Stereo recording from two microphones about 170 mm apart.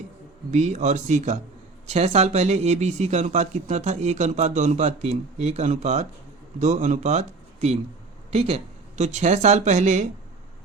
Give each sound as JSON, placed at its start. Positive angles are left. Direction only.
{"t": 0.5, "sound": "speech", "side_deg": -45}